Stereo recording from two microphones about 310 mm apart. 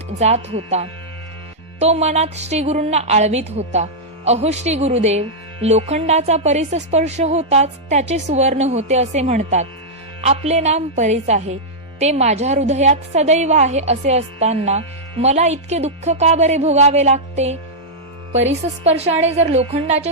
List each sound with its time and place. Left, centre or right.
0.2 s a woman's voice: right
18.9 s a woman's voice: centre